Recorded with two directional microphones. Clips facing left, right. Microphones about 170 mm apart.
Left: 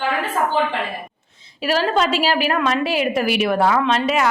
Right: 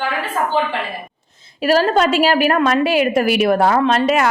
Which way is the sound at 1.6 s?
45° right (ahead or behind).